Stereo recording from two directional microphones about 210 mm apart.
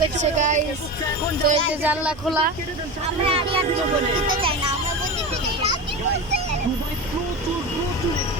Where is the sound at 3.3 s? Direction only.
30° right (ahead or behind).